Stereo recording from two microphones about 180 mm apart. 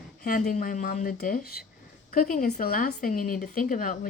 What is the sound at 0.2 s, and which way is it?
Speech, 50° left (ahead or behind).